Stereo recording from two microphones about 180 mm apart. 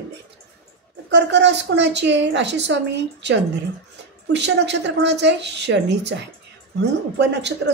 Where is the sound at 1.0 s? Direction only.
75° right (ahead or behind).